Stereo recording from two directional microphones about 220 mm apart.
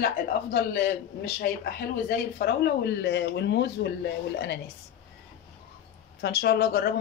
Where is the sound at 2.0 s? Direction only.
45° left (ahead or behind).